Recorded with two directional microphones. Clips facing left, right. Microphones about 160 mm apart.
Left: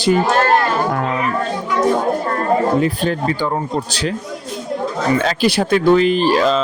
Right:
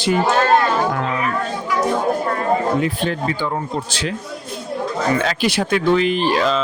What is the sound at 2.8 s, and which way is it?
A man's voice, 40° left (ahead or behind).